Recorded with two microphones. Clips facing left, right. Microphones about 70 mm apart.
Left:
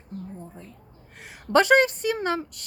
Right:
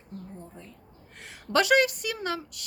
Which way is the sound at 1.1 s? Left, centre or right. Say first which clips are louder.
Left 2 dB; centre.